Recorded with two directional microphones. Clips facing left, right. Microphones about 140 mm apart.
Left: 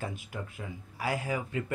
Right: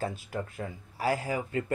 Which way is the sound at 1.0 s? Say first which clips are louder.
Right 3 dB; 35° right (ahead or behind).